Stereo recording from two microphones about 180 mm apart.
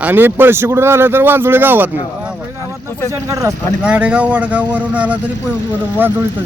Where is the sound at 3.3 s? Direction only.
20° right (ahead or behind).